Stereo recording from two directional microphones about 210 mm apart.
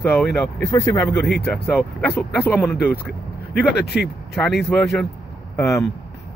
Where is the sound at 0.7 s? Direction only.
15° left (ahead or behind).